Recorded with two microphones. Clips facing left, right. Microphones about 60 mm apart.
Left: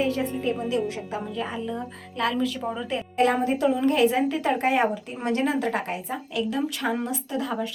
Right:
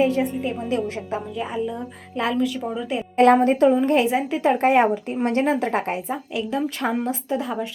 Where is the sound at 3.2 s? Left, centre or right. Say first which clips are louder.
Right 7 dB; right.